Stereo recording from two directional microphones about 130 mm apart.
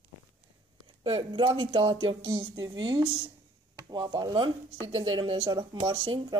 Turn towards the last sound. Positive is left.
turn(degrees=-35)  # may be behind; listen again after turning